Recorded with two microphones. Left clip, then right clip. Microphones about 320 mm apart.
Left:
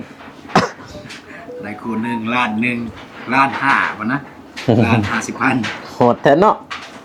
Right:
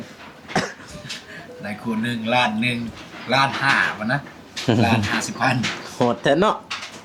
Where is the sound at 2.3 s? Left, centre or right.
Right.